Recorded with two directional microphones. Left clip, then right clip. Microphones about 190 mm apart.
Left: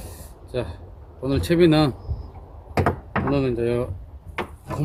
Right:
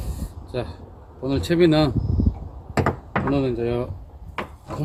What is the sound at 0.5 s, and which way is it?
Speech, centre (ahead or behind).